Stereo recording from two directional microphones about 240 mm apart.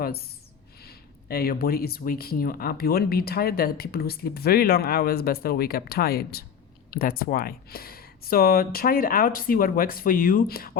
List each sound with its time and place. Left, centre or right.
0.8 s speech: left